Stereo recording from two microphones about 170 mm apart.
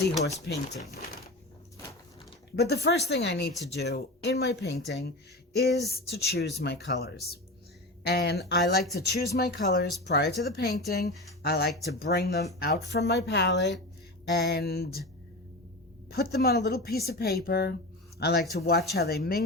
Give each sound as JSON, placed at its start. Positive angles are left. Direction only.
{"t": 0.4, "sound": "speech", "side_deg": 80}
{"t": 2.6, "sound": "speech", "side_deg": 75}
{"t": 6.6, "sound": "speech", "side_deg": 90}
{"t": 8.0, "sound": "speech", "side_deg": 70}
{"t": 14.3, "sound": "speech", "side_deg": 75}
{"t": 16.0, "sound": "speech", "side_deg": 65}